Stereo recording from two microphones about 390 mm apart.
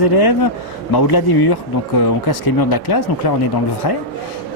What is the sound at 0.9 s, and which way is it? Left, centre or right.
Speech, left.